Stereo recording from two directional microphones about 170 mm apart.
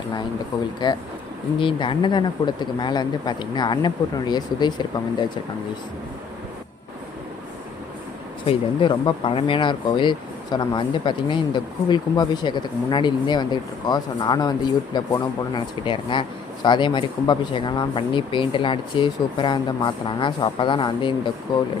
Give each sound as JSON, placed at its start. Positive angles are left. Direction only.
{"t": 0.8, "sound": "speech", "side_deg": 25}
{"t": 8.4, "sound": "speech", "side_deg": 30}